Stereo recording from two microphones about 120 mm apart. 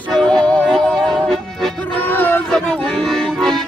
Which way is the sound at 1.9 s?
15° left (ahead or behind).